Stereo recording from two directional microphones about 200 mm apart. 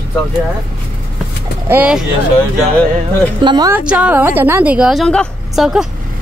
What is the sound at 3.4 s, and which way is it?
Speech, 20° right (ahead or behind).